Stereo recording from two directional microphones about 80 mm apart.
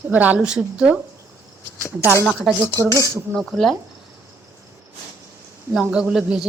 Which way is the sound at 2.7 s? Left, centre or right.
Left.